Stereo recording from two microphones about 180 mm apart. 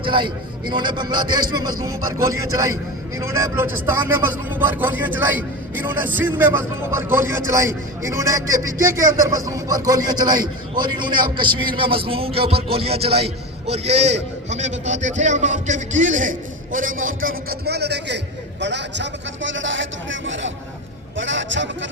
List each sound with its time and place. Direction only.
0.0 s a man's voice: 25° right (ahead or behind); by 21.8 s 90° right